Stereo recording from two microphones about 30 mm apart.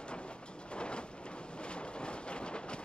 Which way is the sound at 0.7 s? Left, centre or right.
Left.